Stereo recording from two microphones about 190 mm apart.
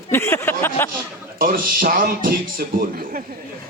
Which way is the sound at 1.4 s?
50° right (ahead or behind).